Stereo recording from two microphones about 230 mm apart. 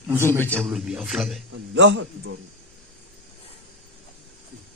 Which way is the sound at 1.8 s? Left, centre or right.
Right.